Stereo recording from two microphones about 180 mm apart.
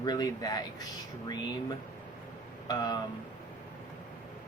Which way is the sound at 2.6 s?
20° left (ahead or behind).